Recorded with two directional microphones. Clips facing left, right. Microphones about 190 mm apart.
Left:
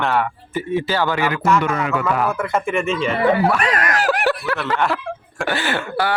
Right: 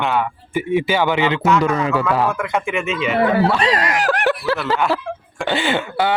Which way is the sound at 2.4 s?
Centre (ahead or behind).